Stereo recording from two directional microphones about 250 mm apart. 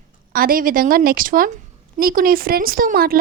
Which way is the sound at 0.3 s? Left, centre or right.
Right.